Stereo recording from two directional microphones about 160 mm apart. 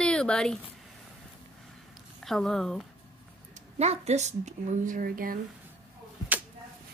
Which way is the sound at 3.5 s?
45° right (ahead or behind).